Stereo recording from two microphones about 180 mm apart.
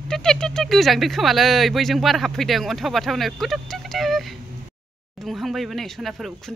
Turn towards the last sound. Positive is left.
turn(degrees=0)  # may be behind; listen again after turning